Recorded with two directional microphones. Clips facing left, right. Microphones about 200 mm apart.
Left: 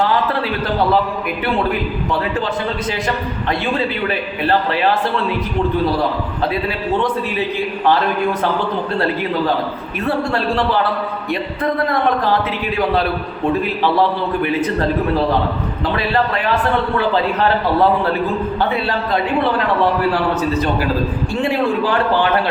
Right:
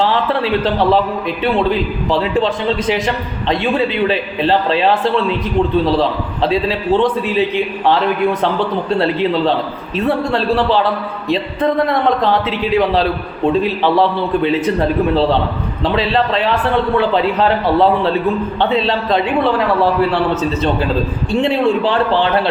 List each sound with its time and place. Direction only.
2.2 s a man's voice: 20° right (ahead or behind)
6.0 s a man's voice: 25° right (ahead or behind)
8.9 s a man's voice: 20° right (ahead or behind)
11.3 s a man's voice: 20° right (ahead or behind)
15.8 s a man's voice: 20° right (ahead or behind)
18.7 s a man's voice: 25° right (ahead or behind)
21.4 s a man's voice: 20° right (ahead or behind)